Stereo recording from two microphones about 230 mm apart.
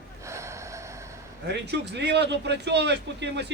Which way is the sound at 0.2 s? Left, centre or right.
Centre.